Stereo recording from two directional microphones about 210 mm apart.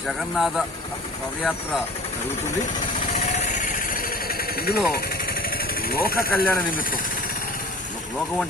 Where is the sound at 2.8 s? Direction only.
40° left (ahead or behind).